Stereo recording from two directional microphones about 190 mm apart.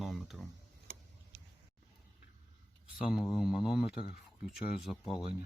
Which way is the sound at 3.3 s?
Centre (ahead or behind).